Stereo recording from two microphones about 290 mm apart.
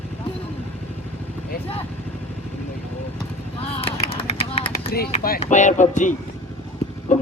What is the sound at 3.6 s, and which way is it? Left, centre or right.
Vehicle, left.